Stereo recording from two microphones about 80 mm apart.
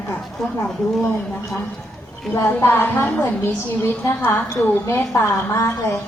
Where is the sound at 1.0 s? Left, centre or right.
Left.